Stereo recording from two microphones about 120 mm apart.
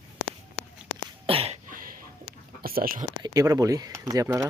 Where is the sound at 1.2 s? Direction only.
55° right (ahead or behind).